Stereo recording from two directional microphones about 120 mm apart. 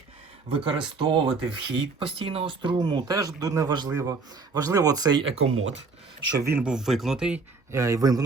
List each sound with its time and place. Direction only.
0.5 s speech: 45° right (ahead or behind)
5.2 s speech: 60° right (ahead or behind)
6.3 s speech: 25° right (ahead or behind)
6.6 s speech: 5° right (ahead or behind)
7.7 s speech: 25° right (ahead or behind)